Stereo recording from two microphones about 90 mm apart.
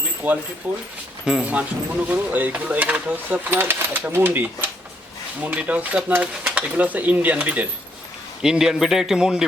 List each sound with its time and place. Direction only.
0.2 s speech: 15° right (ahead or behind)
1.2 s a man's voice: 10° right (ahead or behind)